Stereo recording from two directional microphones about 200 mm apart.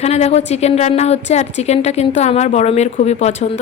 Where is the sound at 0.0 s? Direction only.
30° left (ahead or behind).